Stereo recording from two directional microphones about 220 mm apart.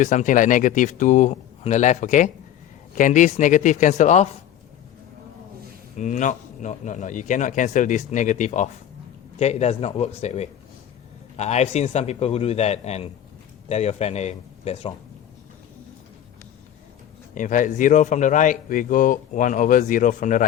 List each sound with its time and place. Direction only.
0.0 s speech: 35° left (ahead or behind)
6.0 s a man's voice: 35° left (ahead or behind)
17.3 s speech: 35° left (ahead or behind)